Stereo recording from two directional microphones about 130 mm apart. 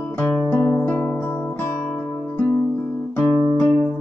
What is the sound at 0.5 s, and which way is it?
Music, 30° left (ahead or behind).